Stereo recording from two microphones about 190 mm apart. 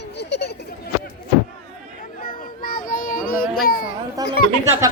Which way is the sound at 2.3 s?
50° left (ahead or behind).